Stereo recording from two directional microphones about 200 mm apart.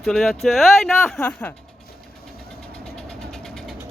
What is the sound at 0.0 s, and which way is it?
Speech, centre (ahead or behind).